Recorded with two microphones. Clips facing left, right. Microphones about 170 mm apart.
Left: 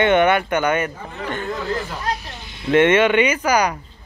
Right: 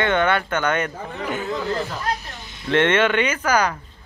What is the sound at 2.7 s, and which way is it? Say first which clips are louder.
Speech: left 4 dB; 10° left (ahead or behind).